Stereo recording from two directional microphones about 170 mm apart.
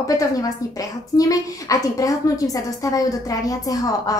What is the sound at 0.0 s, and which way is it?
A woman's voice, 20° left (ahead or behind).